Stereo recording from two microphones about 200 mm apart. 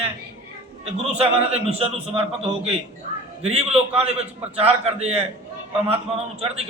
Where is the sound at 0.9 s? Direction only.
30° right (ahead or behind).